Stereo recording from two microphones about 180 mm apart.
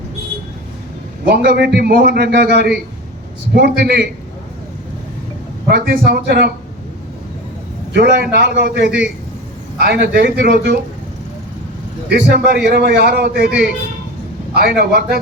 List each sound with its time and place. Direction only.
1.3 s a man's voice: 65° right (ahead or behind)
5.7 s a man's voice: 65° right (ahead or behind)
7.9 s a man's voice: 65° right (ahead or behind)
12.0 s a man's voice: 60° right (ahead or behind)